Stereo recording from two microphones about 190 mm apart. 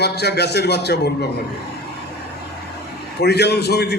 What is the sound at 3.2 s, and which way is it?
Speech, 60° left (ahead or behind).